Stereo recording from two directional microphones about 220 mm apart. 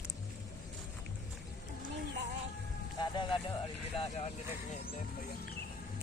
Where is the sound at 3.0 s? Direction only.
20° left (ahead or behind).